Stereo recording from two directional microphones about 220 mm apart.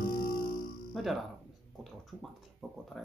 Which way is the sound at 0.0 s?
40° left (ahead or behind).